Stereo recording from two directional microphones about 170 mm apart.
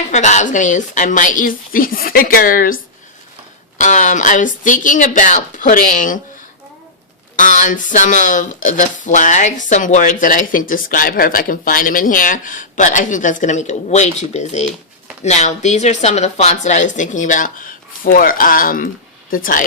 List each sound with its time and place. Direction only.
0.1 s speech: 45° left (ahead or behind)
7.3 s speech: 50° left (ahead or behind)